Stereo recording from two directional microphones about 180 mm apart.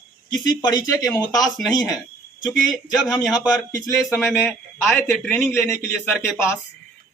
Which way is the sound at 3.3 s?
20° left (ahead or behind).